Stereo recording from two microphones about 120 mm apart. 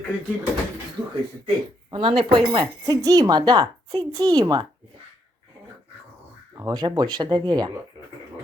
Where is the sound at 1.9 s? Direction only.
45° right (ahead or behind).